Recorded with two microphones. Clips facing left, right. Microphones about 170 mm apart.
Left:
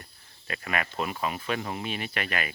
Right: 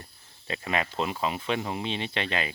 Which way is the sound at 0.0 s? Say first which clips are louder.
Right 2 dB; 25° right (ahead or behind).